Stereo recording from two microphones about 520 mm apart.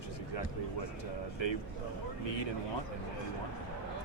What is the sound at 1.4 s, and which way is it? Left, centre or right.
Speech, left.